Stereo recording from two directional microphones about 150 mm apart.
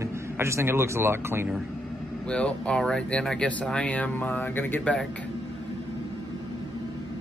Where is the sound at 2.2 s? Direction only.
5° left (ahead or behind).